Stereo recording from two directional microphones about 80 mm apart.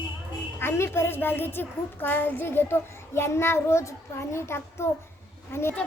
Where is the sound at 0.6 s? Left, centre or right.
Left.